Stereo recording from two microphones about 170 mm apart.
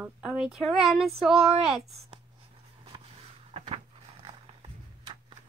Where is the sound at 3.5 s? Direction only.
35° right (ahead or behind).